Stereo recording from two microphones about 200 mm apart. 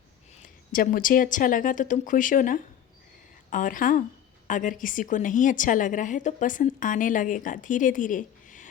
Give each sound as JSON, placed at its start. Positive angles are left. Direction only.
{"t": 0.4, "sound": "a woman's voice", "side_deg": 45}